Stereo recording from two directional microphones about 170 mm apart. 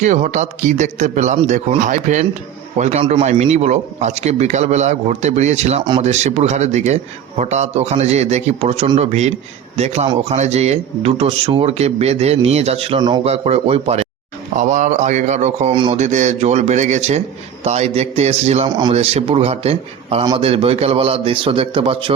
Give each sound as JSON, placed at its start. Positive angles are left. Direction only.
{"t": 0.0, "sound": "a man's voice", "side_deg": -45}
{"t": 15.7, "sound": "speech", "side_deg": -30}
{"t": 16.0, "sound": "a man's voice", "side_deg": -45}
{"t": 18.7, "sound": "speech", "side_deg": -25}
{"t": 18.9, "sound": "a man's voice", "side_deg": -35}